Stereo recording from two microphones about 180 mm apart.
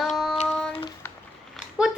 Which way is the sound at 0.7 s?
30° left (ahead or behind).